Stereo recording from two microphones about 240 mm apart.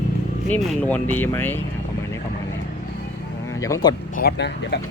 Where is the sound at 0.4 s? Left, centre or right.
Centre.